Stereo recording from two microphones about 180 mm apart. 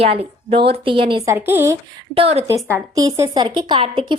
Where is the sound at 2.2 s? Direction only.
35° right (ahead or behind).